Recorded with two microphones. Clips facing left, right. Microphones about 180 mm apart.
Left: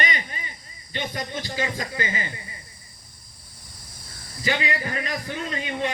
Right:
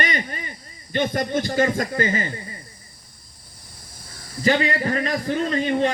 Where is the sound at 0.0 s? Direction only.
45° right (ahead or behind).